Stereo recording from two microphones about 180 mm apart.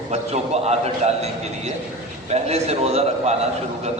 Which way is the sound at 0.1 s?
35° right (ahead or behind).